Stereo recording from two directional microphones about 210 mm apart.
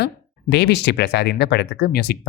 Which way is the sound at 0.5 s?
55° left (ahead or behind).